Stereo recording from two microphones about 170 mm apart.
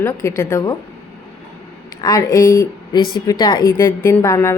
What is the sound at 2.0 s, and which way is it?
A woman's voice, 20° left (ahead or behind).